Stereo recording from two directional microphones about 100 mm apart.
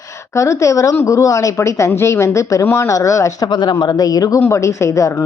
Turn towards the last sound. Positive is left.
turn(degrees=30)  # may be behind; listen again after turning